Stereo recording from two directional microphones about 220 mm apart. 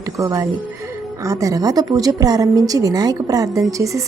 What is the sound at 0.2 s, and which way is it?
A woman's voice, 15° right (ahead or behind).